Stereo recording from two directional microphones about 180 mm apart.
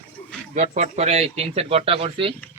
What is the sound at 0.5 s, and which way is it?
Speech, 40° right (ahead or behind).